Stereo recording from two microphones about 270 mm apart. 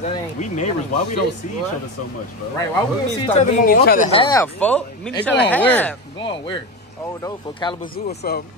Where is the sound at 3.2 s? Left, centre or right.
Left; by 6.0 s centre.